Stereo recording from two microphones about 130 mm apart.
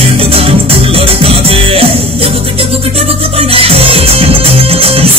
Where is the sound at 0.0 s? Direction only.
50° right (ahead or behind).